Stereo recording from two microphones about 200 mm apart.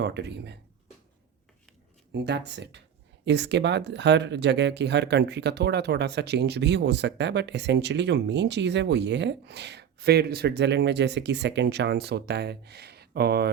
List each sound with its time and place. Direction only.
0.0 s speech: 60° right (ahead or behind)
2.1 s speech: 55° right (ahead or behind)